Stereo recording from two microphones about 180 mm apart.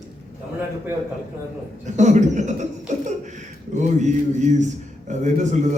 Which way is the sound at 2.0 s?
40° right (ahead or behind).